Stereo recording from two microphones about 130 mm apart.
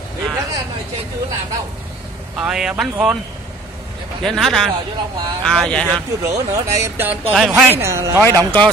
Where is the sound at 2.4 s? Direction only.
5° right (ahead or behind).